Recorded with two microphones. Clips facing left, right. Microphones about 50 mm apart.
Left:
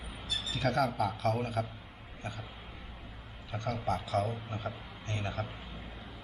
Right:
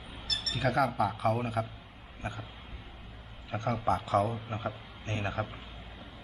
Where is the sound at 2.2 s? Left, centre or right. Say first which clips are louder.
Right 3 dB; right.